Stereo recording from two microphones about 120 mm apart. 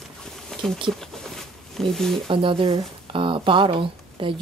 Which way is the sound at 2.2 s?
45° right (ahead or behind).